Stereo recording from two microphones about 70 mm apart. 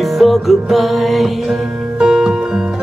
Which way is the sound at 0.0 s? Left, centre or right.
Centre.